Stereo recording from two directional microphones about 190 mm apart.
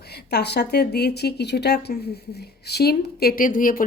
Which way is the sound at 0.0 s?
60° left (ahead or behind).